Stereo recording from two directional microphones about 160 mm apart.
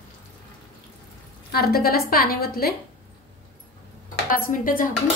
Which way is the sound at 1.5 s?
70° left (ahead or behind).